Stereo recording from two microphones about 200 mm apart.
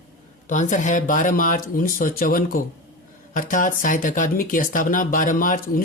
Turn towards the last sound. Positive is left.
turn(degrees=45)  # may be behind; listen again after turning